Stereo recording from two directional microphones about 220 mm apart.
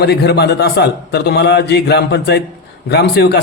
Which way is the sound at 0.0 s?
50° left (ahead or behind).